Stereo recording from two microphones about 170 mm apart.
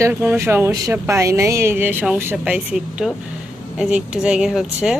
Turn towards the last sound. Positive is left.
turn(degrees=-5)  # may be behind; listen again after turning